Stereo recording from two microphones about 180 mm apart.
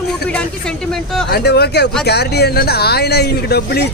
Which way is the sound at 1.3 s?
60° left (ahead or behind).